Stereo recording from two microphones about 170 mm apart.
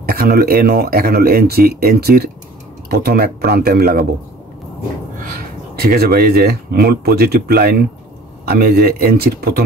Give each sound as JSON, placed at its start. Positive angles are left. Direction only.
{"t": 0.0, "sound": "speech", "side_deg": -65}
{"t": 5.8, "sound": "speech", "side_deg": -65}